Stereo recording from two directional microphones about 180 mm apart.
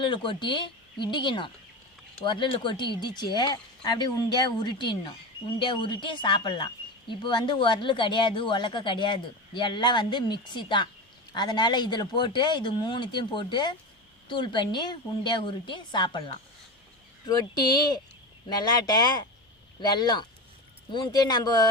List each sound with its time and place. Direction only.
0.0 s a woman's voice: 25° left (ahead or behind)